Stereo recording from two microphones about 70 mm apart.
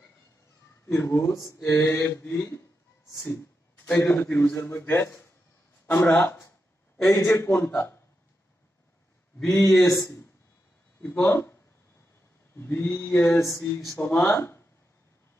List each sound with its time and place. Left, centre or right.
0.8 s mantra: left
3.1 s speech: left
4.2 s a man's voice: left
5.9 s a man's voice: centre
7.2 s a man's voice: left
7.5 s mantra: left
9.4 s speech: centre
9.8 s a man's voice: left
11.0 s speech: left
12.5 s a man's voice: left
13.4 s a man's voice: left
13.8 s mantra: left
14.3 s speech: left